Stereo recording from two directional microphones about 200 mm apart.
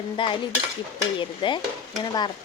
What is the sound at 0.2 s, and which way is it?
Stir, 25° left (ahead or behind).